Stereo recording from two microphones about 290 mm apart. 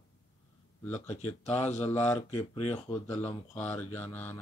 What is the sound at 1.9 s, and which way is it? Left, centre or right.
Speech, left.